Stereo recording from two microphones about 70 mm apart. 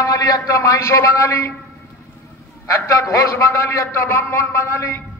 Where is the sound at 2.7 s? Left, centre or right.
Left.